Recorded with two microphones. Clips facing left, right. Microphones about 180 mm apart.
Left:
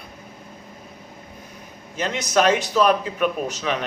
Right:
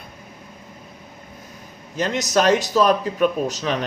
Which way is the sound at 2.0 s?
40° right (ahead or behind).